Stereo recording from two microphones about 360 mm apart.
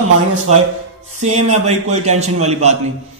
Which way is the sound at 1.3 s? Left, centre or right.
Centre.